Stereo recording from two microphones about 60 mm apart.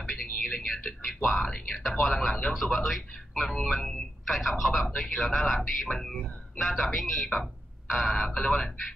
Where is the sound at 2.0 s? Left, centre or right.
Centre.